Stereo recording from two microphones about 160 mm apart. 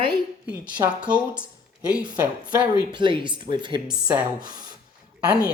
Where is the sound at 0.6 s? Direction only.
10° right (ahead or behind).